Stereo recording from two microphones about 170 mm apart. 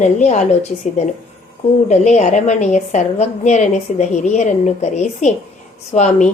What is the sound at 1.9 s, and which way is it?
A woman's voice, 45° left (ahead or behind).